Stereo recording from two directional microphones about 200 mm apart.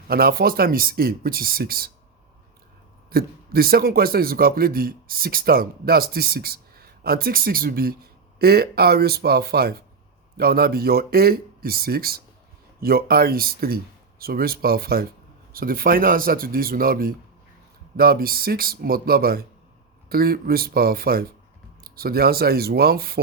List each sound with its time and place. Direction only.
0.1 s speech: 50° right (ahead or behind)
3.1 s speech: 50° right (ahead or behind)